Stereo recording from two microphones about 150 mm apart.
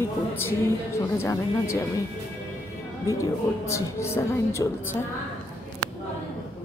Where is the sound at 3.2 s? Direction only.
20° left (ahead or behind).